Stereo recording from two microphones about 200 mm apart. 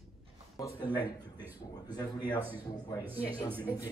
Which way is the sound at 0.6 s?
20° left (ahead or behind).